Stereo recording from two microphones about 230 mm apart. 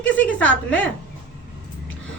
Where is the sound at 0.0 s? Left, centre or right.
Centre.